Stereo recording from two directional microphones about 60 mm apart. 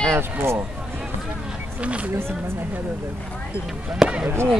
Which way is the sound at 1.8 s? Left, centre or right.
Right.